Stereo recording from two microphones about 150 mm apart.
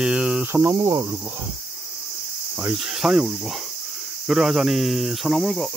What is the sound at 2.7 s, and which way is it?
Cricket, 5° right (ahead or behind).